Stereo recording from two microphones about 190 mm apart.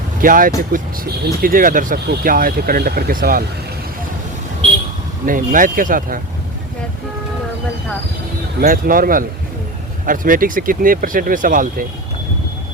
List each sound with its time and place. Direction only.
0.2 s speech: 45° right (ahead or behind)
5.2 s speech: 45° right (ahead or behind)
8.6 s speech: 50° right (ahead or behind)